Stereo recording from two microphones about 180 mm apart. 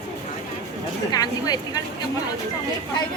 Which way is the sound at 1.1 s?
20° left (ahead or behind).